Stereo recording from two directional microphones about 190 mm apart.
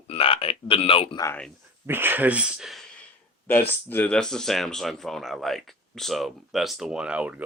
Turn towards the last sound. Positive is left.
turn(degrees=-5)  # may be behind; listen again after turning